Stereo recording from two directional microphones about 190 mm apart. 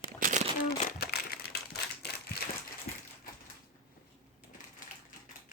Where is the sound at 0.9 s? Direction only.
55° left (ahead or behind).